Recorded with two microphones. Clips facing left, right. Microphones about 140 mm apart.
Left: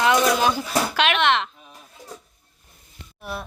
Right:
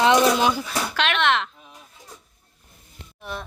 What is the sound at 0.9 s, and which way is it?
Speech, 5° left (ahead or behind).